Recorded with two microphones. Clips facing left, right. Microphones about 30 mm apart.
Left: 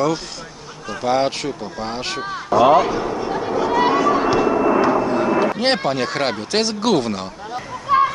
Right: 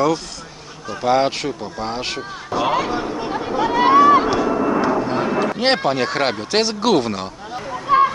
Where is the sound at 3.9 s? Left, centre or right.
Right.